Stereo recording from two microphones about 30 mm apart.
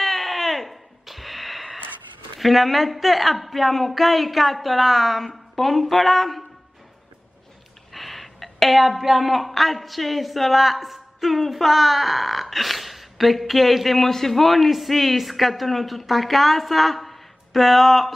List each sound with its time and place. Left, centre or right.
0.0 s a sound: centre
2.4 s a woman's voice: centre
7.9 s a woman's voice: centre